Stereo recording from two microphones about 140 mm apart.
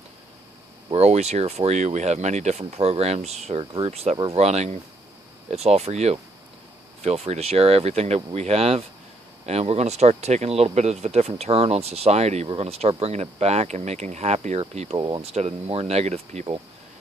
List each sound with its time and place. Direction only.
0.9 s speech: 50° right (ahead or behind)
15.0 s speech: 30° right (ahead or behind)
15.3 s speech: 50° right (ahead or behind)